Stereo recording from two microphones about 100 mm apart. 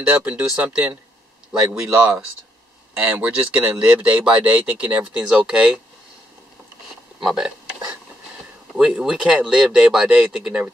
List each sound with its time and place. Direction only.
0.2 s speech: 15° right (ahead or behind)
7.2 s a sound: 5° right (ahead or behind)
8.7 s speech: 5° right (ahead or behind)